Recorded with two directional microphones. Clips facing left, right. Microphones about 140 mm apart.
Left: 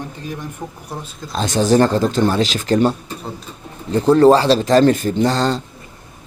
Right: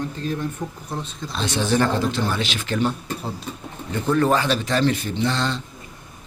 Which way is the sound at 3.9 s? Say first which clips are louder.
Left 9 dB; 35° left (ahead or behind).